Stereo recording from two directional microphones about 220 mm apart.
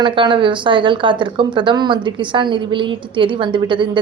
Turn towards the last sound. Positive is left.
turn(degrees=-20)  # may be behind; listen again after turning